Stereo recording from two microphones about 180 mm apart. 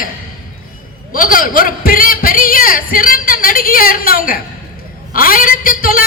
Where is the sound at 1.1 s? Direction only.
50° left (ahead or behind).